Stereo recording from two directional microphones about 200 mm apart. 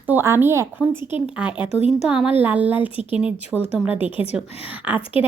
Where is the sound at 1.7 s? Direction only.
30° left (ahead or behind).